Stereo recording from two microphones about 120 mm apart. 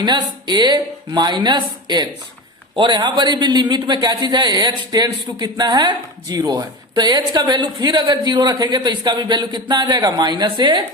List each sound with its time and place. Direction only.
0.0 s a man's voice: 35° right (ahead or behind)